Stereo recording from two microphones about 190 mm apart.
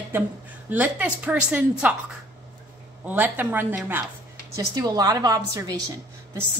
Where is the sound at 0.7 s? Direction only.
10° right (ahead or behind).